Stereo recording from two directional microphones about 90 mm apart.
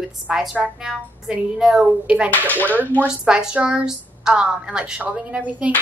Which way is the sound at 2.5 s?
20° left (ahead or behind).